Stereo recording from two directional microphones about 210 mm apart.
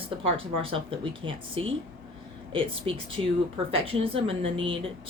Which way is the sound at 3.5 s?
25° right (ahead or behind).